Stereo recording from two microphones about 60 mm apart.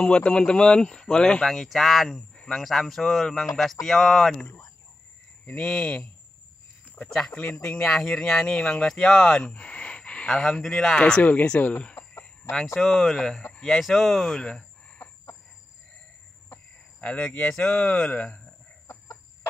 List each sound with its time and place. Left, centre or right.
0.0 s speech: centre
5.4 s speech: left
5.7 s speech: centre
7.1 s speech: centre
10.2 s speech: centre
11.0 s speech: centre
12.7 s speech: centre
13.5 s a sound: centre
13.7 s speech: centre
17.0 s speech: left
17.5 s speech: centre
17.7 s speech: left